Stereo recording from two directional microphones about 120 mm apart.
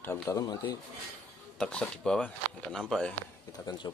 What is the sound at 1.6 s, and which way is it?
Speech, 5° left (ahead or behind).